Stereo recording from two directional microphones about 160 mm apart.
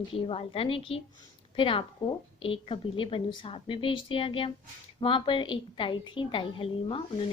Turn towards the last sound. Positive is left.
turn(degrees=30)  # may be behind; listen again after turning